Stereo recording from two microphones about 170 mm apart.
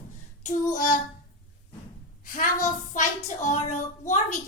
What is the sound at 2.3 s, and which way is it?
A woman's voice, 50° left (ahead or behind).